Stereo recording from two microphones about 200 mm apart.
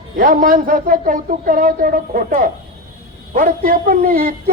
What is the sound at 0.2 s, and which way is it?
A man's voice, 45° right (ahead or behind).